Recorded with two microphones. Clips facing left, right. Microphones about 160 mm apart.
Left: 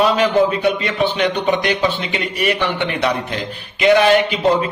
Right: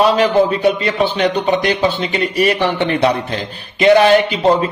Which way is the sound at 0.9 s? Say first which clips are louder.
Right 2 dB; 35° right (ahead or behind).